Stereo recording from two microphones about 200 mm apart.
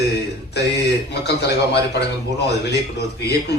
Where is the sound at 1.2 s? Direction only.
55° left (ahead or behind).